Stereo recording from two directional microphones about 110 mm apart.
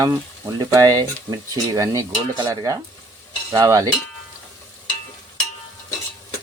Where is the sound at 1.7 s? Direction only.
30° right (ahead or behind).